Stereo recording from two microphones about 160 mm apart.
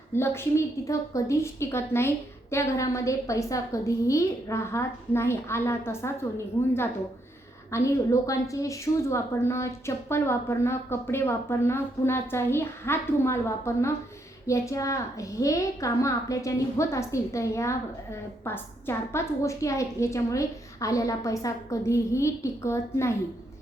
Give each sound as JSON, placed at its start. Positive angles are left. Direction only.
{"t": 0.1, "sound": "a woman's voice", "side_deg": 15}
{"t": 7.7, "sound": "a woman's voice", "side_deg": 20}